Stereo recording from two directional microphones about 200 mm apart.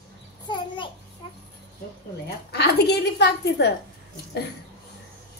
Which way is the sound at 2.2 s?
55° left (ahead or behind).